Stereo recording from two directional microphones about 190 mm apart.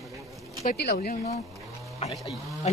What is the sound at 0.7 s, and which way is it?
Speech, 55° left (ahead or behind).